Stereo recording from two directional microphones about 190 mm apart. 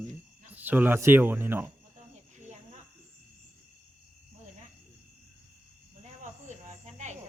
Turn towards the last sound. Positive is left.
turn(degrees=-40)  # may be behind; listen again after turning